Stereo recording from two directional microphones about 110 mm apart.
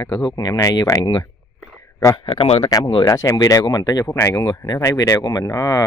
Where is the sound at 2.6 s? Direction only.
35° left (ahead or behind).